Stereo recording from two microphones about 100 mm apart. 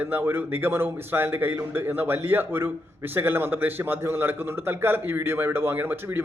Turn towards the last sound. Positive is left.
turn(degrees=-20)  # may be behind; listen again after turning